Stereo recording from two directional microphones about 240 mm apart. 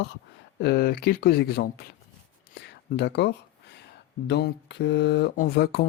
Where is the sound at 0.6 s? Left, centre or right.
Left.